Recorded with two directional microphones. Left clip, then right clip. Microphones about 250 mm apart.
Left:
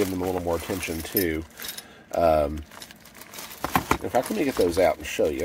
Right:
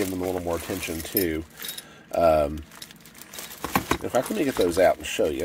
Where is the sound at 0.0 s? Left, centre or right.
Centre.